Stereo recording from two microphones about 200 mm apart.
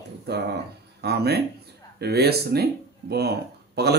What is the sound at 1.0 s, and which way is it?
Speech, 55° right (ahead or behind).